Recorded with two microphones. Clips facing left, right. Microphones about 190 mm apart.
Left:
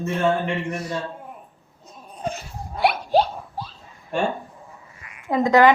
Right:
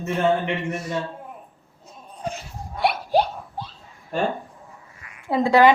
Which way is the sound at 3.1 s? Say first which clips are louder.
Left 1 dB; 15° right (ahead or behind).